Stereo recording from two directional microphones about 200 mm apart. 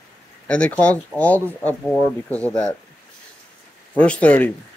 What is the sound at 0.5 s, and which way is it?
Speech, 5° left (ahead or behind).